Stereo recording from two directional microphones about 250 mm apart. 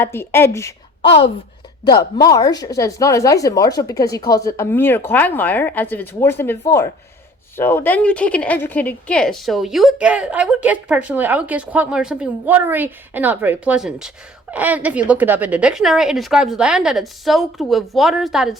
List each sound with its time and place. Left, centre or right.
0.0 s speech: centre
1.9 s speech: centre